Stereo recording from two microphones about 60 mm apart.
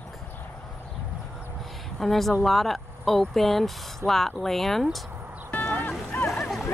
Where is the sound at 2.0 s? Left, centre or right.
Centre.